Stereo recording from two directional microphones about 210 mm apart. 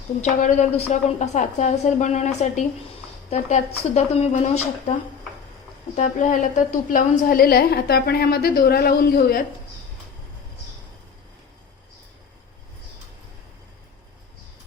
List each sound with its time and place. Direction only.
0.2 s a woman's voice: 35° left (ahead or behind)
6.0 s a woman's voice: 35° left (ahead or behind)